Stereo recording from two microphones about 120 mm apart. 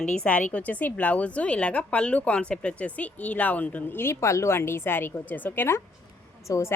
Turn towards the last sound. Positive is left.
turn(degrees=20)  # may be behind; listen again after turning